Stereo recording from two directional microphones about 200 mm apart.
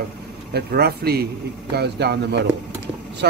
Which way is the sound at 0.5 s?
50° right (ahead or behind).